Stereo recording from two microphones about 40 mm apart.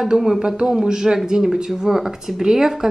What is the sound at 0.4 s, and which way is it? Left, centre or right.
Speech, centre.